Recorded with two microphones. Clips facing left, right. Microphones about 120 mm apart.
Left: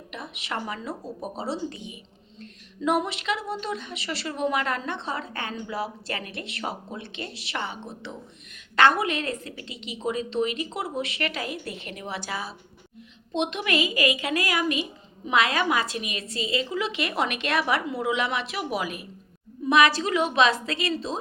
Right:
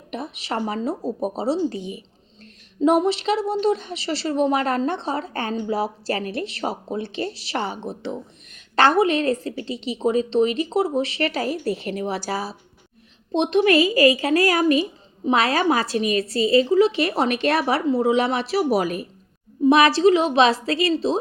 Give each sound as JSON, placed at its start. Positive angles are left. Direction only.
{"t": 0.1, "sound": "a woman's voice", "side_deg": -35}